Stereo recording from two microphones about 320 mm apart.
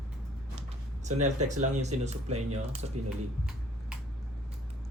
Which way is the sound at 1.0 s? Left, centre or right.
Right.